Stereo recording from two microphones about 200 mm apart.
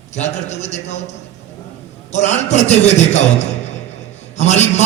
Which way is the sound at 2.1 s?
35° left (ahead or behind).